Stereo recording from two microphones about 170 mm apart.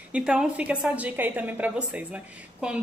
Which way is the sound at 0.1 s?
5° right (ahead or behind).